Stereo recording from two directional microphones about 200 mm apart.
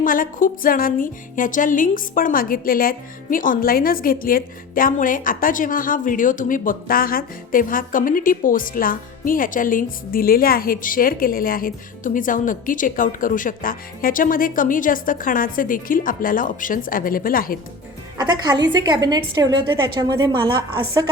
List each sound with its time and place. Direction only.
0.0 s speech: 45° left (ahead or behind)
18.2 s a woman's voice: 20° right (ahead or behind)